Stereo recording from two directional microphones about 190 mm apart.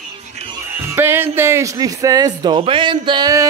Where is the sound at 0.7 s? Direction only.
10° right (ahead or behind).